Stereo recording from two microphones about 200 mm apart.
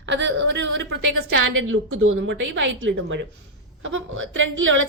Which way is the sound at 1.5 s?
90° right.